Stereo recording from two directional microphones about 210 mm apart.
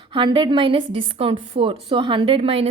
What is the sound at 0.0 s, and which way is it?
A woman's voice, 25° right (ahead or behind).